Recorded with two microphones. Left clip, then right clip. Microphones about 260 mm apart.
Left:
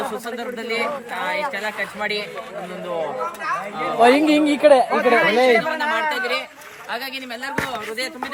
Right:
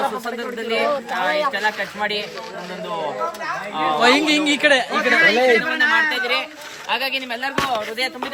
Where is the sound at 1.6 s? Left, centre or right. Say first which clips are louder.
Right 3 dB; centre.